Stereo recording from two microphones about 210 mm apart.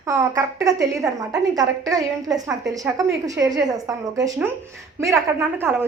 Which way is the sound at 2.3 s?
Centre (ahead or behind).